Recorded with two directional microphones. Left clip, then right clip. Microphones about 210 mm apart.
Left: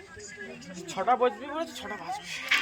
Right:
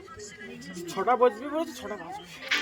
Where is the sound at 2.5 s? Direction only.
60° right (ahead or behind).